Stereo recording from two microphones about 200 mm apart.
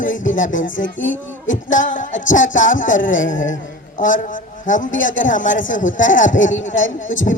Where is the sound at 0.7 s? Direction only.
70° left (ahead or behind).